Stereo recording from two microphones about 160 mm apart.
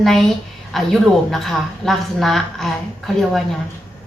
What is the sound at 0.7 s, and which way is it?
A woman's voice, centre (ahead or behind).